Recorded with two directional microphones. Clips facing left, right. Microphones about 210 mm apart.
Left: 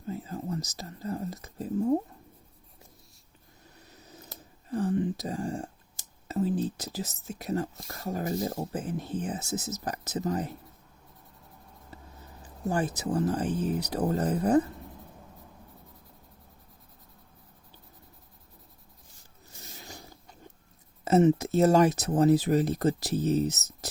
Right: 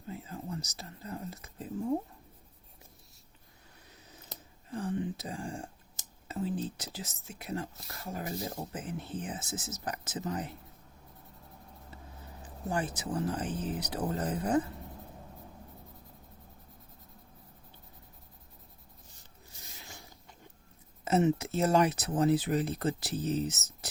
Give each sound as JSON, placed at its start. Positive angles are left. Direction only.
{"t": 0.1, "sound": "speech", "side_deg": 40}
{"t": 4.7, "sound": "whispering", "side_deg": 40}
{"t": 6.2, "sound": "speech", "side_deg": 40}
{"t": 12.6, "sound": "speech", "side_deg": 40}
{"t": 21.0, "sound": "speech", "side_deg": 40}